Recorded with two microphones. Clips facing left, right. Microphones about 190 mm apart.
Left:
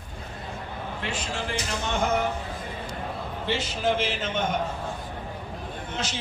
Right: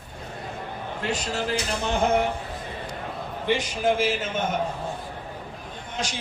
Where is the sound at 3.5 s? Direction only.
15° right (ahead or behind).